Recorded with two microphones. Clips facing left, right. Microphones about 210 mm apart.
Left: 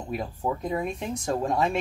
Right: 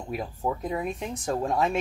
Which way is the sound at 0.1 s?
Centre (ahead or behind).